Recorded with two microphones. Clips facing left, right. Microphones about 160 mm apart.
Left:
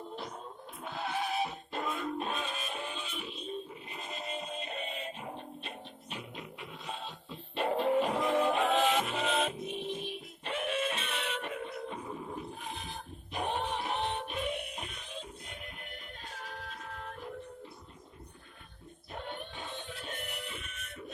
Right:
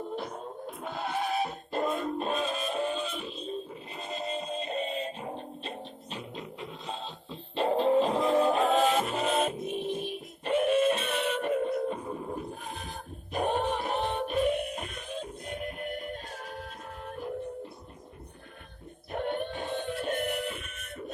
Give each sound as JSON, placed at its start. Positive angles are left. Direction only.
{"t": 0.2, "sound": "music", "side_deg": -50}
{"t": 19.1, "sound": "music", "side_deg": -55}